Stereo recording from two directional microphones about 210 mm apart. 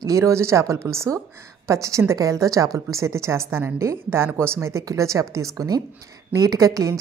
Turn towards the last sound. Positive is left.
turn(degrees=-15)  # may be behind; listen again after turning